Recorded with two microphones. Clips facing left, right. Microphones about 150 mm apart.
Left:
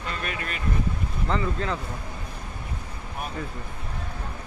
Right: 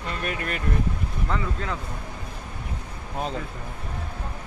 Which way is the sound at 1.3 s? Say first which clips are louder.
Left 2 dB; centre (ahead or behind).